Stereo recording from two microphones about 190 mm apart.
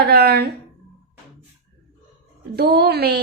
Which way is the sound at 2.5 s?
55° right (ahead or behind).